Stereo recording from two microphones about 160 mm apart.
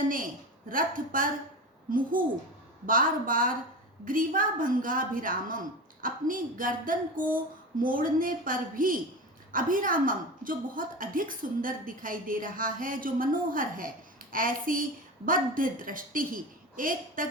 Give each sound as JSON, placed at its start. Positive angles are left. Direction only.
{"t": 0.7, "sound": "a woman's voice", "side_deg": -60}